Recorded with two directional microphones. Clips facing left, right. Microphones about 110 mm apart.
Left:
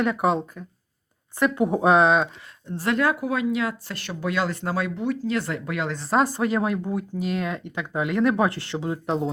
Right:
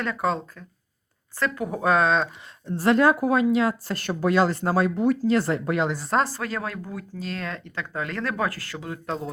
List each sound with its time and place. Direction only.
0.0 s speech: 15° left (ahead or behind)
2.6 s speech: 35° right (ahead or behind)
6.2 s speech: 20° left (ahead or behind)